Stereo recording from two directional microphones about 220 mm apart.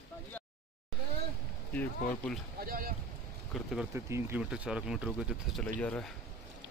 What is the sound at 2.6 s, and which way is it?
Boat, 40° right (ahead or behind).